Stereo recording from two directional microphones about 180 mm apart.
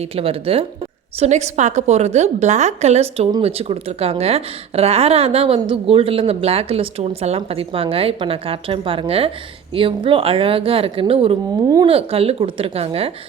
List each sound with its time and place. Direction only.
0.2 s a woman's voice: 30° right (ahead or behind)